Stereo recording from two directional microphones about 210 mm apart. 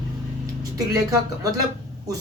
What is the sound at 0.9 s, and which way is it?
Speech, 15° right (ahead or behind).